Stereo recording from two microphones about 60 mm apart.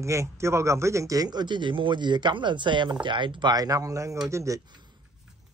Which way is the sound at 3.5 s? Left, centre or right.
Right.